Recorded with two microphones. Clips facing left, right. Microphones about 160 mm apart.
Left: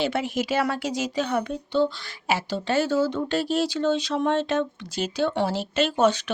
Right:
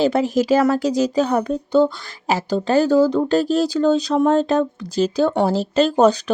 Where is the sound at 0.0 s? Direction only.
40° right (ahead or behind).